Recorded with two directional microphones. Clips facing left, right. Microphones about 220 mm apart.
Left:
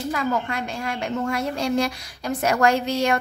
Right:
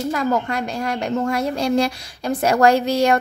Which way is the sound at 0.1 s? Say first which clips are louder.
Right 3 dB; 40° right (ahead or behind).